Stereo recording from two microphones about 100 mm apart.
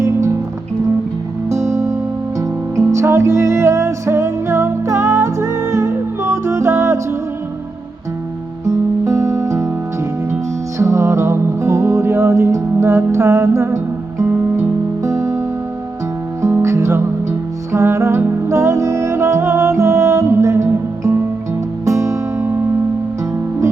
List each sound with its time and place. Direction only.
0.0 s music: 30° right (ahead or behind)
1.5 s music: 30° right (ahead or behind)
8.6 s music: 30° right (ahead or behind)
10.8 s music: 30° right (ahead or behind)